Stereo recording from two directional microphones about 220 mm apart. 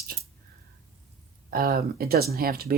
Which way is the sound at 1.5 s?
45° right (ahead or behind).